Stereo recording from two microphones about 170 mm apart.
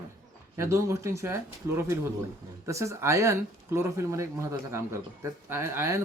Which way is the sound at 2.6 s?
15° right (ahead or behind).